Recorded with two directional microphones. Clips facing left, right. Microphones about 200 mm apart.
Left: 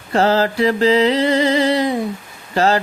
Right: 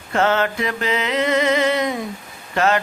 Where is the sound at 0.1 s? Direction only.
35° left (ahead or behind).